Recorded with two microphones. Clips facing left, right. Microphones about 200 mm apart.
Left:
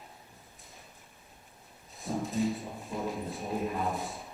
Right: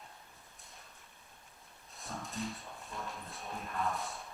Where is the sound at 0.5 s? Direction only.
Centre (ahead or behind).